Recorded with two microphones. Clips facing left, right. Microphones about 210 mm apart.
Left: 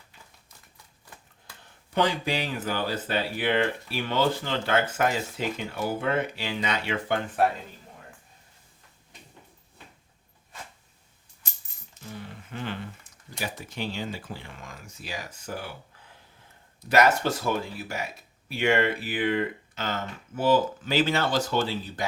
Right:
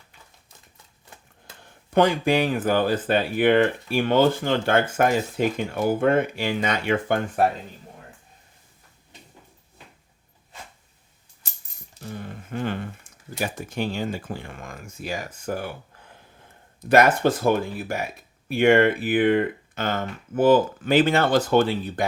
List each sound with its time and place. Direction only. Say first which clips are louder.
1.9 s speech: right 7 dB; 50° right (ahead or behind)
11.9 s speech: right 5 dB; 50° right (ahead or behind)